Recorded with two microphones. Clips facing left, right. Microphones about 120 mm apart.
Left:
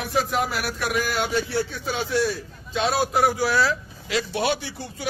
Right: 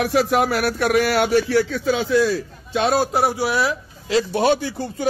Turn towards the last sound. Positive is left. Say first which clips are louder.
# right 6 dB
turn(degrees=-40)  # may be behind; listen again after turning